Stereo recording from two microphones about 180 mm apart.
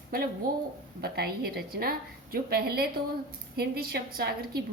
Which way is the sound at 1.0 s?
60° right (ahead or behind).